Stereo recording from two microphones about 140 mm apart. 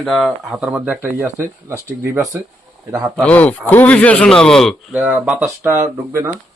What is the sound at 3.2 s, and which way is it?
A man's voice, 10° left (ahead or behind).